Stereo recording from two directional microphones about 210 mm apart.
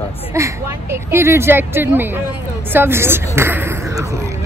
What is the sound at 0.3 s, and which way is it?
A woman's voice, 15° right (ahead or behind).